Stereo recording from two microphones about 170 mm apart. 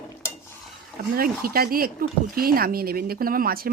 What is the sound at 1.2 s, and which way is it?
Speech, 60° right (ahead or behind).